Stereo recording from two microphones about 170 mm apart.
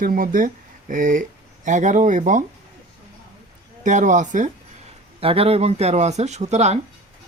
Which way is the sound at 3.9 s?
45° right (ahead or behind).